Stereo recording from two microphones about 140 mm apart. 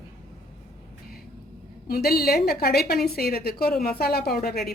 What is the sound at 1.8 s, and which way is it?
A woman's voice, 90° left.